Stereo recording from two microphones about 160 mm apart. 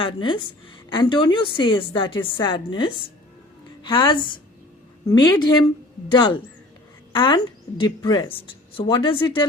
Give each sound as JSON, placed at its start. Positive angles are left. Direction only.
{"t": 0.0, "sound": "a woman's voice", "side_deg": 30}